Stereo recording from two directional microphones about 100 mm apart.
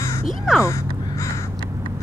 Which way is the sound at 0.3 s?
5° right (ahead or behind).